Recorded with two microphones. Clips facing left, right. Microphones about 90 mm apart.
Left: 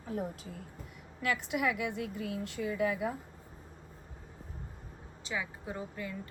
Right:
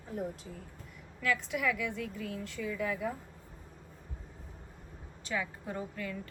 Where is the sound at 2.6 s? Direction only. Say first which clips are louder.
Left 4 dB; 55° left (ahead or behind).